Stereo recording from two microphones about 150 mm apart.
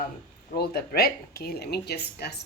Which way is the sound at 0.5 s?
90° left.